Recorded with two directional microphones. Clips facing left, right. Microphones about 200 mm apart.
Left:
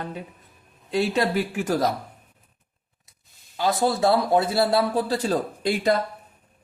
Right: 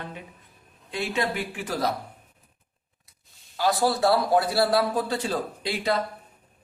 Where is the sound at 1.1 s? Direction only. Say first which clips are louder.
Left 5 dB; 40° left (ahead or behind).